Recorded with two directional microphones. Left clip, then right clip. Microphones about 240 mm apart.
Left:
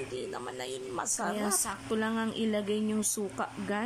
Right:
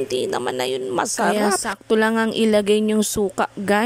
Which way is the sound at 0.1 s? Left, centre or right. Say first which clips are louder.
Right 15 dB; right.